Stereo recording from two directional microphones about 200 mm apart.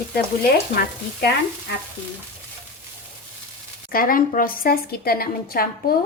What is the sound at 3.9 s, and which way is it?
A woman's voice, 45° left (ahead or behind).